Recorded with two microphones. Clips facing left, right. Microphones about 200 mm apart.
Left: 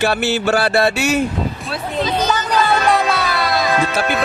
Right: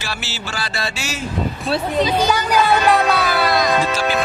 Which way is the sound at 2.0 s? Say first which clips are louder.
Right 1 dB; 10° right (ahead or behind).